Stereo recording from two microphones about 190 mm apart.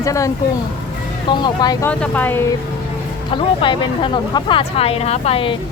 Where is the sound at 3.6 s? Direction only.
25° left (ahead or behind).